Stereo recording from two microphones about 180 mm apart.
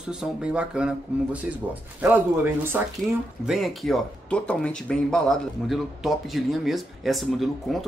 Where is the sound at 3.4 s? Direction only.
Centre (ahead or behind).